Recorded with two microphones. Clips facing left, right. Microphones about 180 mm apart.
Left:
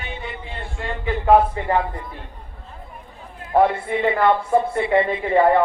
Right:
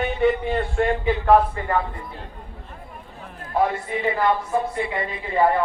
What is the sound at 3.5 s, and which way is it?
A woman's voice, 60° left (ahead or behind).